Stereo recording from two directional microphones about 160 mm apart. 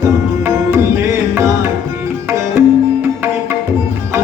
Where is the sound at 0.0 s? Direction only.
15° right (ahead or behind).